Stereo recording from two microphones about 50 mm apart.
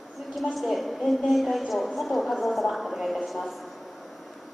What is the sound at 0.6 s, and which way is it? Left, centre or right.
A woman's voice, centre.